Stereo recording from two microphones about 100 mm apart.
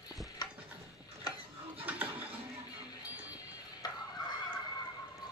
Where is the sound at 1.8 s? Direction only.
15° right (ahead or behind).